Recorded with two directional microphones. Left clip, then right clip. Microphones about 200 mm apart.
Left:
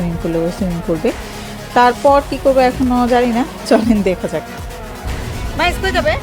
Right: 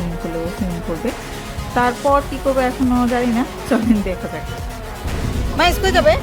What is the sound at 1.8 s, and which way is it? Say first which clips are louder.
Speech: left 5 dB; 25° left (ahead or behind).